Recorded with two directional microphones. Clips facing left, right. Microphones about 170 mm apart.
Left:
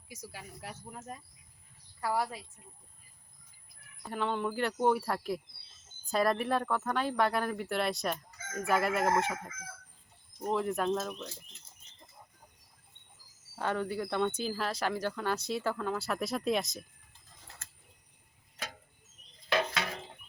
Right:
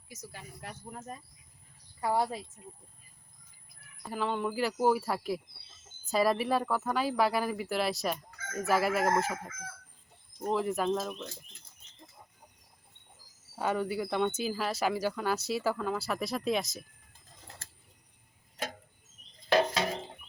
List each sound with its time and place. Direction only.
0.1 s speech: 10° left (ahead or behind)
2.0 s a woman's voice: 25° right (ahead or behind)
4.1 s speech: 5° right (ahead or behind)
10.5 s speech: centre (ahead or behind)
13.6 s speech: 10° right (ahead or behind)
19.5 s a sound: 35° right (ahead or behind)